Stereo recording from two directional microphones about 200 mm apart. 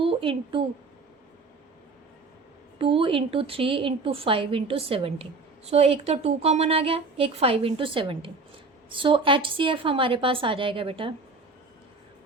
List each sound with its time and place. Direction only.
0.0 s a woman's voice: 25° right (ahead or behind)
2.7 s a woman's voice: 25° right (ahead or behind)